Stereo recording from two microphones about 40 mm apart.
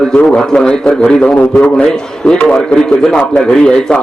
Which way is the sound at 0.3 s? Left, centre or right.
Centre.